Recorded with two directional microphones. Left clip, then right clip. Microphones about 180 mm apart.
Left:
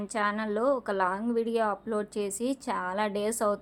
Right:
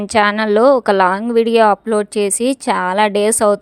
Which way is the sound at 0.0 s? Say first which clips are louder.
Right 16 dB; 55° right (ahead or behind).